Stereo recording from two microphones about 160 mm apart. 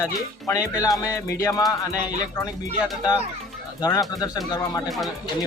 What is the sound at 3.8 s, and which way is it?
Speech, 25° left (ahead or behind).